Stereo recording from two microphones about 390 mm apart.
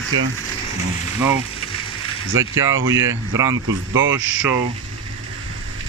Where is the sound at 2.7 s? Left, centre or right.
Right.